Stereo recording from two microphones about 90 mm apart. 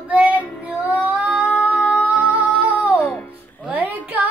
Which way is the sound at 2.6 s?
15° right (ahead or behind).